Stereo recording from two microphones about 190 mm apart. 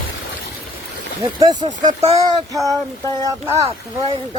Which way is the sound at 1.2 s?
20° right (ahead or behind).